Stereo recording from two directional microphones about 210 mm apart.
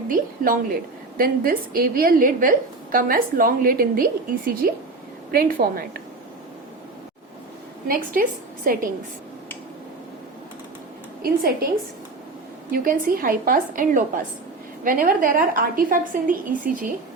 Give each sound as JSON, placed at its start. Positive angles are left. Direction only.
{"t": 0.1, "sound": "a woman's voice", "side_deg": -40}
{"t": 7.9, "sound": "a woman's voice", "side_deg": -45}
{"t": 11.2, "sound": "a woman's voice", "side_deg": -45}
{"t": 12.7, "sound": "a woman's voice", "side_deg": -45}